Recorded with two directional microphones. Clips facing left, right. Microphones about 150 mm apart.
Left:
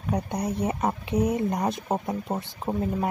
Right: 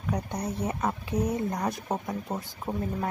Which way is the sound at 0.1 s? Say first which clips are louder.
Left 4 dB; 20° left (ahead or behind).